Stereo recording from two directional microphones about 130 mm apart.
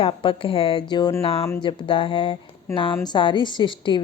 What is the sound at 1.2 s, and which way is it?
Speech, 50° left (ahead or behind).